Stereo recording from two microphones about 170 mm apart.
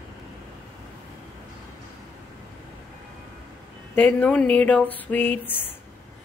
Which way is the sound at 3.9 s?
10° left (ahead or behind).